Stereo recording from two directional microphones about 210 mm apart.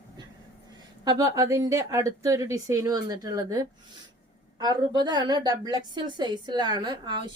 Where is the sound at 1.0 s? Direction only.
15° right (ahead or behind).